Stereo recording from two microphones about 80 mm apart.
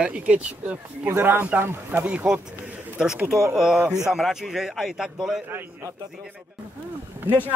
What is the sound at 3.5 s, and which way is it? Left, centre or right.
A man's voice, centre.